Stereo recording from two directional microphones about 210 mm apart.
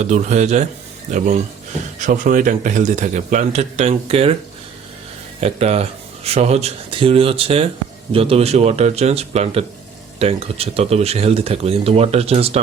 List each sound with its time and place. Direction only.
0.0 s a man's voice: 35° right (ahead or behind)
5.4 s speech: 30° right (ahead or behind)